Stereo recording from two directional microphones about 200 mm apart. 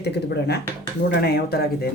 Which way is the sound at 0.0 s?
55° left (ahead or behind).